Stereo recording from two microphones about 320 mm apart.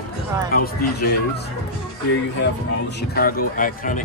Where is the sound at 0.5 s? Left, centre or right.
Left.